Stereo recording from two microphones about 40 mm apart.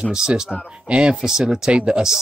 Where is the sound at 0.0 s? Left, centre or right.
Centre.